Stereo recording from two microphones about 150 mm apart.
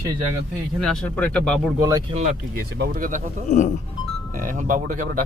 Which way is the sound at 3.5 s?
55° left (ahead or behind).